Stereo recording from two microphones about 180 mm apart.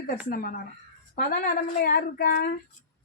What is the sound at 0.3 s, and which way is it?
A woman's voice, 55° left (ahead or behind).